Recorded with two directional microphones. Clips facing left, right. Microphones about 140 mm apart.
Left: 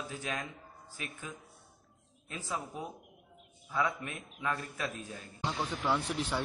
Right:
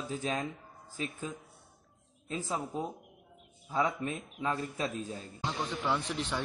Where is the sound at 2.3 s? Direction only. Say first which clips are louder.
Right 4 dB; 30° right (ahead or behind).